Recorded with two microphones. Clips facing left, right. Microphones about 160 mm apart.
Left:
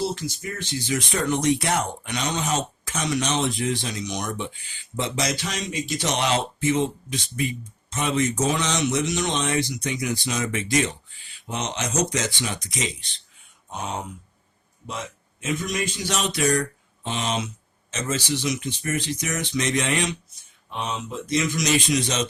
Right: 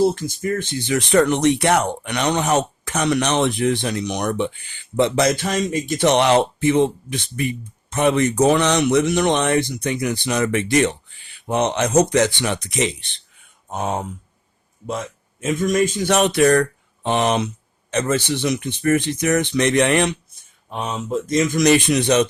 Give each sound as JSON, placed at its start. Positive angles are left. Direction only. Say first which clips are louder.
{"t": 0.0, "sound": "speech", "louder": "right 9 dB", "side_deg": -50}
{"t": 13.7, "sound": "speech", "louder": "right 7 dB", "side_deg": -50}